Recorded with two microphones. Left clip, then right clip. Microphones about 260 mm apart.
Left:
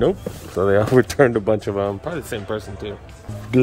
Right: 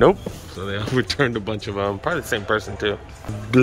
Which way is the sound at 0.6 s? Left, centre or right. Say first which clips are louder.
Left 9 dB; centre.